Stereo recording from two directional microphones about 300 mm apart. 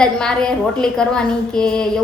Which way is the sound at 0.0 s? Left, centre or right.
Centre.